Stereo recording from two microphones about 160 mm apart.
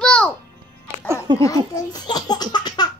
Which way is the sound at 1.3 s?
30° right (ahead or behind).